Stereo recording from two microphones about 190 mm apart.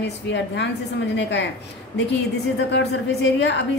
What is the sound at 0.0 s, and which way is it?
Speech, 65° left (ahead or behind).